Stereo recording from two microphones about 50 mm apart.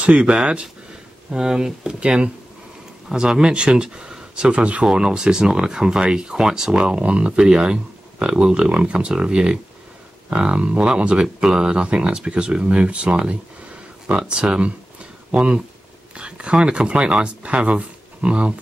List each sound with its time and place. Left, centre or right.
0.0 s speech: right
4.8 s speech: centre